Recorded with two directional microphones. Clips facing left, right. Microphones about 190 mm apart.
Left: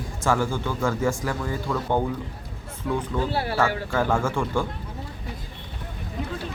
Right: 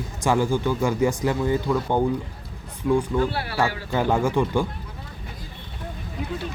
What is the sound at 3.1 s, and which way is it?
Speech, 10° right (ahead or behind).